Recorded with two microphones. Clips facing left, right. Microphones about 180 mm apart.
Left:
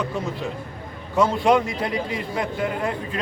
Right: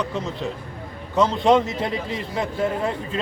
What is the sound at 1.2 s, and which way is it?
A man's voice, 20° right (ahead or behind).